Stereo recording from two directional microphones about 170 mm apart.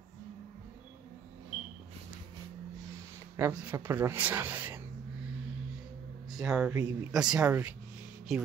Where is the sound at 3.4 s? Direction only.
10° right (ahead or behind).